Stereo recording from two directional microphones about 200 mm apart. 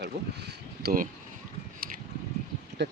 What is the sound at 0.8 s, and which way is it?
Speech, 45° right (ahead or behind).